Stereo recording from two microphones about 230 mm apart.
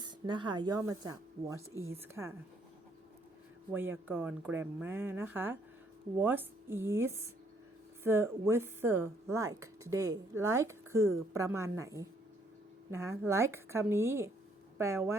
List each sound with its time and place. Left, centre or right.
0.0 s speech: centre
3.7 s speech: centre